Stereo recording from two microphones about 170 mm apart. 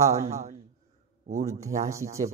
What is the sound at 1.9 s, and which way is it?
Mantra, 20° right (ahead or behind).